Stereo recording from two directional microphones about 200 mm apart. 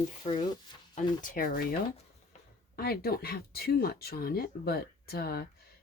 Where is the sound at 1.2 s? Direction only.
45° left (ahead or behind).